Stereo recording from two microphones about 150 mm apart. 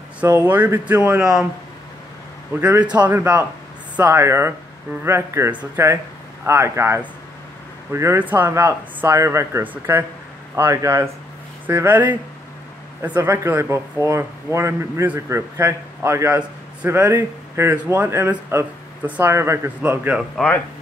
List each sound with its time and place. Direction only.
0.5 s a man's voice: 10° right (ahead or behind)
2.6 s a man's voice: 10° right (ahead or behind)
20.4 s speech: 5° left (ahead or behind)